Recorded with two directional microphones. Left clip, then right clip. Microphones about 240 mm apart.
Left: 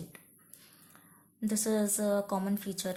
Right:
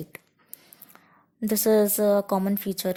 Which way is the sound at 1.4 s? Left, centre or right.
Right.